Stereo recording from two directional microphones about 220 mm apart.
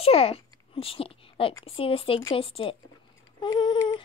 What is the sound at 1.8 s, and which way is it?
Speech, 25° left (ahead or behind).